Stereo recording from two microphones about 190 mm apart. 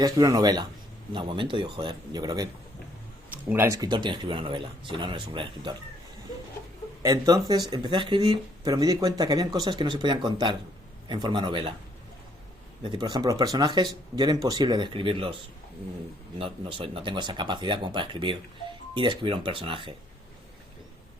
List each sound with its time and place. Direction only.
0.0 s speech: 20° right (ahead or behind)
3.5 s speech: 15° right (ahead or behind)
7.0 s speech: 20° right (ahead or behind)
12.8 s speech: 25° right (ahead or behind)
16.4 s speech: 30° right (ahead or behind)